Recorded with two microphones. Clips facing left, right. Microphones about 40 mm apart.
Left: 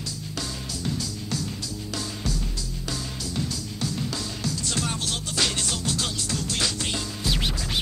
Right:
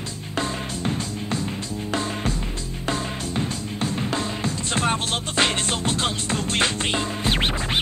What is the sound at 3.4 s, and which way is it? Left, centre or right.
Music, right.